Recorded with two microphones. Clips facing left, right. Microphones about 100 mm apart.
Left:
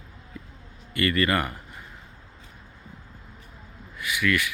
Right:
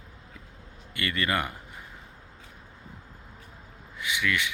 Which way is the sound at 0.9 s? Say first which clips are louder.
Left 5 dB; 15° right (ahead or behind).